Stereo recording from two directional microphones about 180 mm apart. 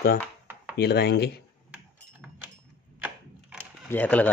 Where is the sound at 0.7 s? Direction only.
65° left (ahead or behind).